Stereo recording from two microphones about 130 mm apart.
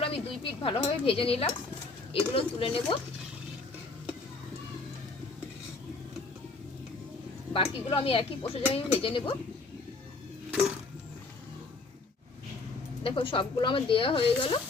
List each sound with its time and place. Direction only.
0.0 s a woman's voice: 45° left (ahead or behind)
7.5 s a woman's voice: 40° left (ahead or behind)
13.0 s speech: 45° left (ahead or behind)